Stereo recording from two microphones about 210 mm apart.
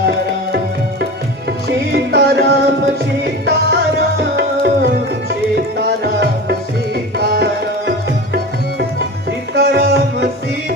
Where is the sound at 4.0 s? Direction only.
50° right (ahead or behind).